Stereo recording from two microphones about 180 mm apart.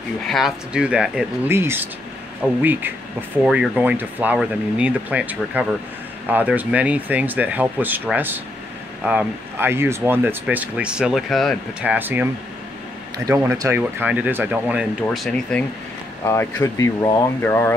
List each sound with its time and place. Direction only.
0.3 s speech: centre (ahead or behind)
16.3 s speech: 15° left (ahead or behind)